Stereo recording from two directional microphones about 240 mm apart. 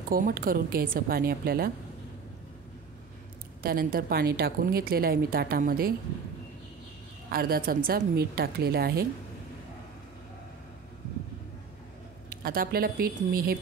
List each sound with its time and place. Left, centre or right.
0.1 s a woman's voice: right
3.6 s a woman's voice: right
7.2 s a woman's voice: right
12.3 s a woman's voice: right